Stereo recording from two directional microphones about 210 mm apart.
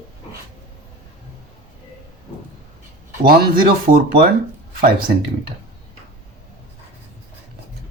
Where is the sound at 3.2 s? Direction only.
45° right (ahead or behind).